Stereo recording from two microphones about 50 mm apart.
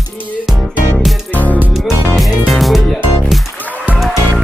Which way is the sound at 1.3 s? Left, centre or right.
Left.